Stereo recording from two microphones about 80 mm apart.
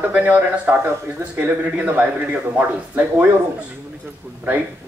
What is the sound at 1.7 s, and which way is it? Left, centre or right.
Speech, centre.